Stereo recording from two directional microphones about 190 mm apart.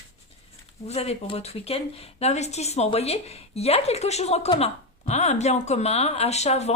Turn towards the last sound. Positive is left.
turn(degrees=35)  # may be behind; listen again after turning